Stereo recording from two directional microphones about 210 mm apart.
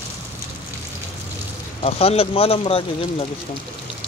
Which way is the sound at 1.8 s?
30° left (ahead or behind).